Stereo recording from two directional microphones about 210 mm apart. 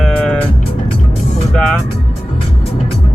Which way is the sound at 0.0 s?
5° left (ahead or behind).